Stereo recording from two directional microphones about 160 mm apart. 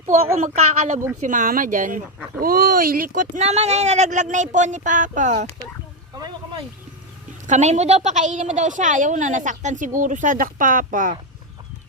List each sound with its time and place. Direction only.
0.0 s a woman's voice: 45° right (ahead or behind); by 3.2 s 65° right (ahead or behind)
3.3 s a woman's voice: 45° right (ahead or behind)
6.1 s a sound: 25° right (ahead or behind)
7.4 s a woman's voice: 45° right (ahead or behind)